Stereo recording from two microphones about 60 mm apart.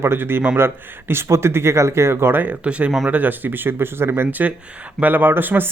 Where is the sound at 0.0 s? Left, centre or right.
Right.